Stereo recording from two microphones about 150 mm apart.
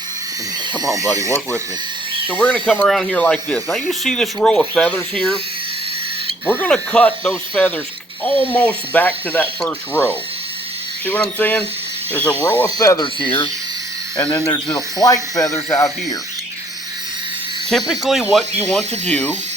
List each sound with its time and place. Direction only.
0.7 s speech: 25° right (ahead or behind)
2.3 s speech: 10° left (ahead or behind)
6.5 s speech: 10° left (ahead or behind); by 13.5 s 35° left (ahead or behind)
14.2 s speech: 10° left (ahead or behind)
14.9 s speech: 25° left (ahead or behind)
17.7 s speech: centre (ahead or behind)
18.7 s speech: 10° left (ahead or behind)